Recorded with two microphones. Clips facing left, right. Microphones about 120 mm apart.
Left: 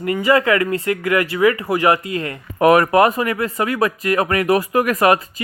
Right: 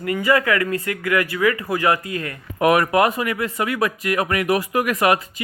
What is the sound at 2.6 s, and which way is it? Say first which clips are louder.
Speech: left 4 dB; 40° left (ahead or behind).